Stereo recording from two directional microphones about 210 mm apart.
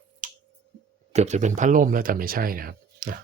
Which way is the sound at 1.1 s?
35° right (ahead or behind).